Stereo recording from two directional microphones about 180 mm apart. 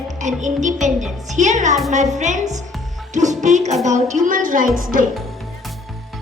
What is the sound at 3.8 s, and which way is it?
A woman's voice, 40° right (ahead or behind).